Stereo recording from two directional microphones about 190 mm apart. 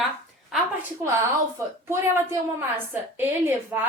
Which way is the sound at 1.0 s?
15° right (ahead or behind).